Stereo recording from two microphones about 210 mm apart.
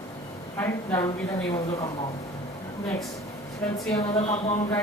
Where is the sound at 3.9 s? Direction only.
30° left (ahead or behind).